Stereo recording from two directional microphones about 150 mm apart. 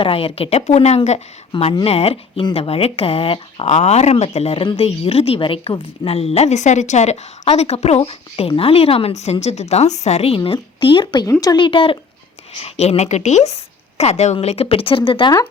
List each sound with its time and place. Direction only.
0.0 s a woman's voice: 35° left (ahead or behind)